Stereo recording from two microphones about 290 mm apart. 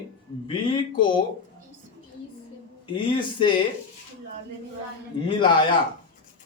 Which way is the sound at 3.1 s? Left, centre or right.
Centre.